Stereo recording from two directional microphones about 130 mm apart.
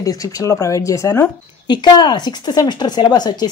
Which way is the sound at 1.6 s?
35° left (ahead or behind).